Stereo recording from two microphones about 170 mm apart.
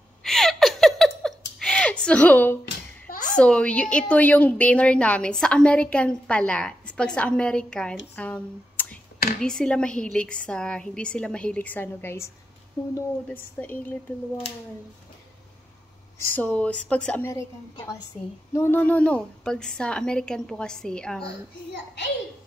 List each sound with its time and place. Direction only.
0.2 s gasp: centre (ahead or behind)
3.1 s a sound: 50° left (ahead or behind)
3.3 s a woman's voice: 5° left (ahead or behind)
16.3 s a woman's voice: 10° left (ahead or behind)